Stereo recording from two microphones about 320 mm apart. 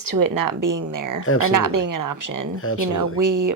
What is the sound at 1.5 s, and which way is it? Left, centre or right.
Speech, right.